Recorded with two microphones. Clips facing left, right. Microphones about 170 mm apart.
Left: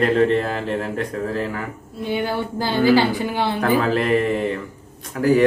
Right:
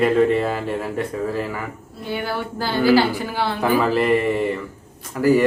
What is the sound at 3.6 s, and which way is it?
Speech, 5° right (ahead or behind).